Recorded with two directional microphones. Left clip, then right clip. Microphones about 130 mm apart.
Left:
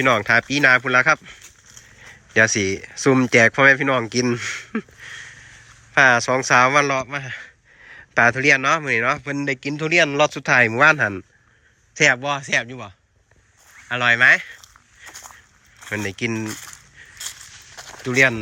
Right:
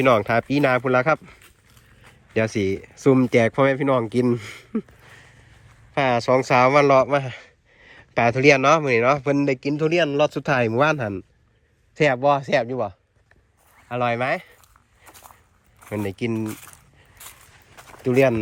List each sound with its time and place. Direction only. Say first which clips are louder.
0.0 s a man's voice: left 1 dB; 15° right (ahead or behind)
2.3 s a man's voice: left 5 dB; 15° right (ahead or behind)
5.9 s a man's voice: left 4 dB; 20° right (ahead or behind)
12.2 s speech: right 3 dB; 40° right (ahead or behind)
16.0 s a man's voice: left 1 dB; 25° right (ahead or behind)
16.4 s a sound: left 1 dB; 5° left (ahead or behind)